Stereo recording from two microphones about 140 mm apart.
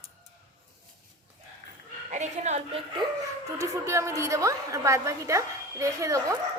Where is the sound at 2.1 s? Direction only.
55° right (ahead or behind).